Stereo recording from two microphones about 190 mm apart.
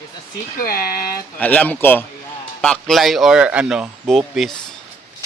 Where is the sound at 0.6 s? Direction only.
50° left (ahead or behind).